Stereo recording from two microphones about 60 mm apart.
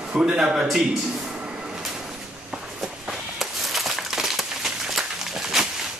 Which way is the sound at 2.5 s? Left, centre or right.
Centre.